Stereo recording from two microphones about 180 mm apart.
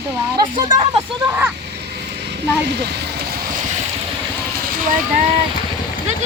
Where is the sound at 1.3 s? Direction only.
10° right (ahead or behind).